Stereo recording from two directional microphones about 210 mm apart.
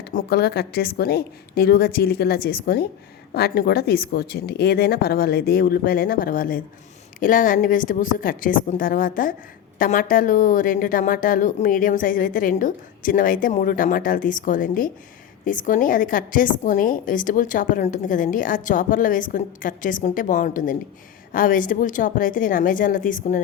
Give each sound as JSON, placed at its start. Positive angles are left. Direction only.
{"t": 0.0, "sound": "a woman's voice", "side_deg": 45}